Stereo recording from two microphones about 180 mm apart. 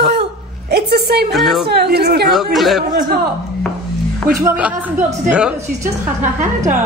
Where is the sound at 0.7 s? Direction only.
60° right (ahead or behind).